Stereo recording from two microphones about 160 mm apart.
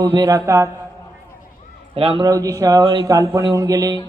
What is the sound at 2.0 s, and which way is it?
Speech, 35° right (ahead or behind).